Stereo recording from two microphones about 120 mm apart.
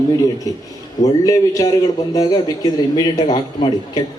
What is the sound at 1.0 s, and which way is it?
A man's voice, 30° left (ahead or behind).